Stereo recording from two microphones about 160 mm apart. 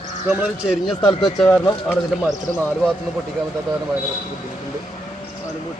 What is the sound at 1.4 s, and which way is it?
Speech, 15° left (ahead or behind).